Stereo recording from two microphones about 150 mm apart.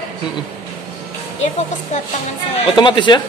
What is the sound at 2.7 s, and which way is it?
Speech, 30° left (ahead or behind).